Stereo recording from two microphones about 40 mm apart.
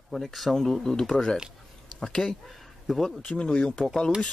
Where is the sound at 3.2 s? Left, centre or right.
Left.